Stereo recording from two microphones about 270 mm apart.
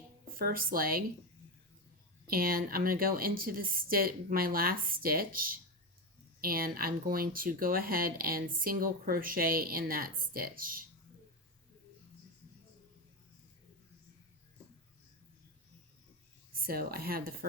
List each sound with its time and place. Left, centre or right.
0.3 s speech: right
2.2 s speech: right
16.6 s speech: right